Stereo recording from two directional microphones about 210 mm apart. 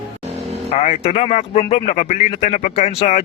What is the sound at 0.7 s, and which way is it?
Speech, 30° left (ahead or behind).